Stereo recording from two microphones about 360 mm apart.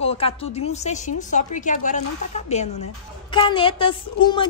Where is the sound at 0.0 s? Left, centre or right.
Centre.